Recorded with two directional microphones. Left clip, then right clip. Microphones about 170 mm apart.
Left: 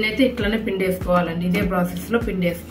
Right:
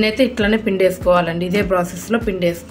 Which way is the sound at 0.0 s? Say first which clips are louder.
Right 4 dB; 85° right.